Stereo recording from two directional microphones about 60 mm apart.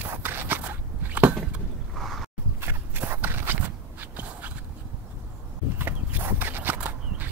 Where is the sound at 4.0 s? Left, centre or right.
Right.